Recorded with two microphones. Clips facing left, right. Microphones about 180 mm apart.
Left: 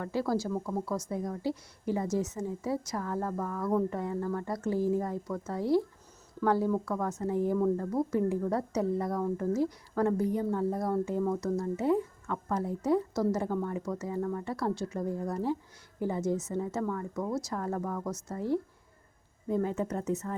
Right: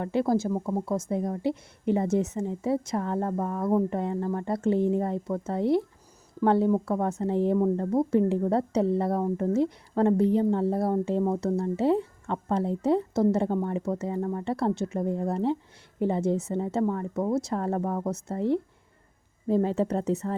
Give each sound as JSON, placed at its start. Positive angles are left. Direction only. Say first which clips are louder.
{"t": 0.0, "sound": "a woman's voice", "louder": "right 5 dB", "side_deg": -20}